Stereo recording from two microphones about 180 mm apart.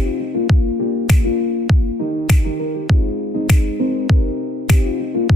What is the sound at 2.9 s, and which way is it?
Music, centre (ahead or behind).